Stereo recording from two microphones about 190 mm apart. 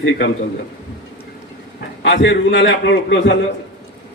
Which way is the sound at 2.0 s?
70° left (ahead or behind).